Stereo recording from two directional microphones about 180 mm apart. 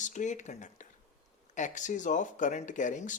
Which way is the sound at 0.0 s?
45° left (ahead or behind).